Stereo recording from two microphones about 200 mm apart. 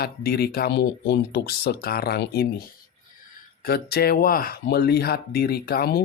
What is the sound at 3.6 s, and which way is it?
Speech, 50° left (ahead or behind).